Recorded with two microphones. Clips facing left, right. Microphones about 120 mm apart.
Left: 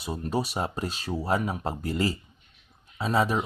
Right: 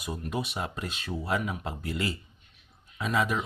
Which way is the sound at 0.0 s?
30° left (ahead or behind).